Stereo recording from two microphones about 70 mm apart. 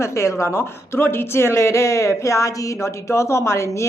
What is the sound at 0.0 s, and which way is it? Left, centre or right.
A woman's voice, left.